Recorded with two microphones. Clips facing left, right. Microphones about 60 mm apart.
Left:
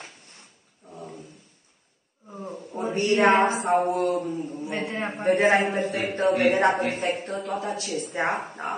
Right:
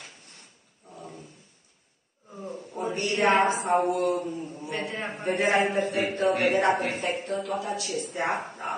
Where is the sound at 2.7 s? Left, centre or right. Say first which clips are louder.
Left 2 dB; left.